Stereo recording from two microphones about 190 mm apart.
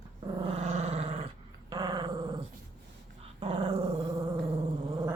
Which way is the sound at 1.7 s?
20° right (ahead or behind).